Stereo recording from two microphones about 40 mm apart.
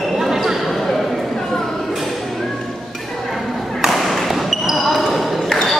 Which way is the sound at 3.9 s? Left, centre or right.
Centre.